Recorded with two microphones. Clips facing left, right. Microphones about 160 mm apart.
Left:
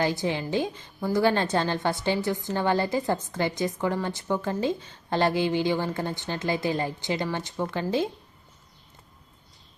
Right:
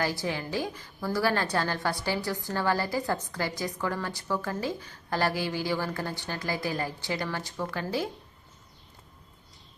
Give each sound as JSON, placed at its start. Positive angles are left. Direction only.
{"t": 0.0, "sound": "a woman's voice", "side_deg": 20}